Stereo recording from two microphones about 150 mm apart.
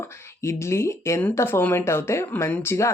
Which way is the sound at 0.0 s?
20° left (ahead or behind).